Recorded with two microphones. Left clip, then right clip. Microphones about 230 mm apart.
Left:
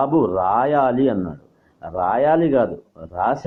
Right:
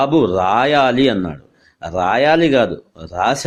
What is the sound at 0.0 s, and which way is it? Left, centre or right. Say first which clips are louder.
A man's voice: right 3 dB; right.